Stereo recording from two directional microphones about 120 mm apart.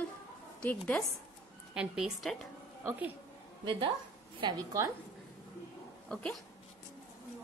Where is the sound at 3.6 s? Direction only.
45° right (ahead or behind).